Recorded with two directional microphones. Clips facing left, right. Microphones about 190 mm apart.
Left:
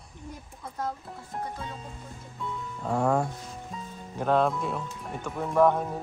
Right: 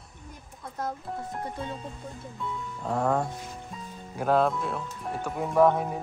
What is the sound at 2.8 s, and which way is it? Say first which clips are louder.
Speech: left 1 dB; 5° left (ahead or behind).